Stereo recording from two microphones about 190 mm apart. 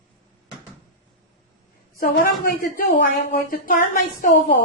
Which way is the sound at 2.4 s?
45° left (ahead or behind).